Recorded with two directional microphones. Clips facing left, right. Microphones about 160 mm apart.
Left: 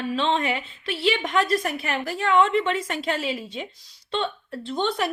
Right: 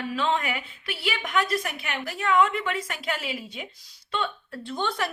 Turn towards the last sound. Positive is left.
turn(degrees=20)  # may be behind; listen again after turning